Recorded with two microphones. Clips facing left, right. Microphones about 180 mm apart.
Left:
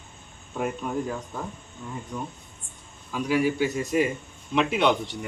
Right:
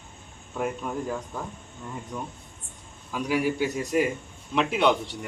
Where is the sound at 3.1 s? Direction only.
10° right (ahead or behind).